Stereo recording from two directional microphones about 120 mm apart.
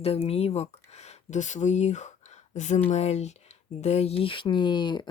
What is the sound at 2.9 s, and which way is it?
Speech, 65° left (ahead or behind).